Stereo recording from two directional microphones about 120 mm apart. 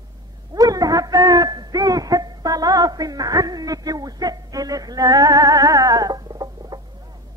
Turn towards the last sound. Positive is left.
turn(degrees=-30)  # may be behind; listen again after turning